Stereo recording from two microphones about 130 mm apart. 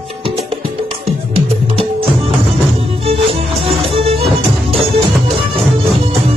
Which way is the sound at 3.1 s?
50° right (ahead or behind).